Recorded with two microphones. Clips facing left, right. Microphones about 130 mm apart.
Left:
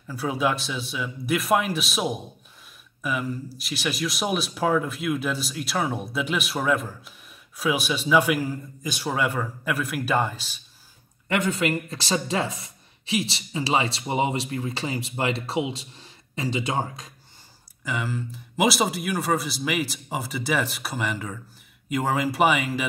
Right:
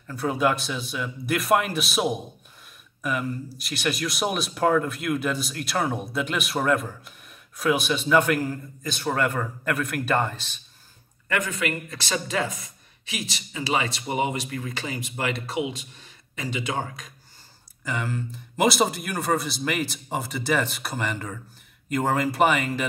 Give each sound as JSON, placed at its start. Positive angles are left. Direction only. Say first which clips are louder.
{"t": 0.0, "sound": "speech", "louder": "right 1 dB", "side_deg": 5}
{"t": 11.2, "sound": "speech", "louder": "left 3 dB", "side_deg": 25}
{"t": 17.8, "sound": "speech", "louder": "even", "side_deg": 5}